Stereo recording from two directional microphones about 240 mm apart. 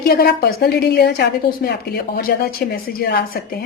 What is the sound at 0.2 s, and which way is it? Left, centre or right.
A woman's voice, left.